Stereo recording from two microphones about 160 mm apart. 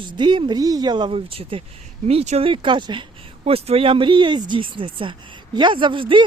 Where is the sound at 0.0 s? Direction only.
30° right (ahead or behind).